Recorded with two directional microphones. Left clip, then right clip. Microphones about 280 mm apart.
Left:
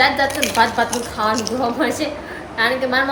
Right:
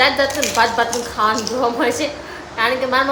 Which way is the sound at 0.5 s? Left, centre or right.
Centre.